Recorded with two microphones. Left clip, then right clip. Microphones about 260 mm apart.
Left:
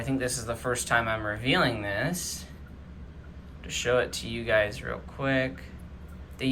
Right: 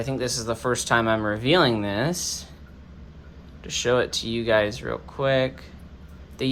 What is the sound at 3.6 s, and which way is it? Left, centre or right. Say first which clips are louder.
Speech: right 4 dB; centre.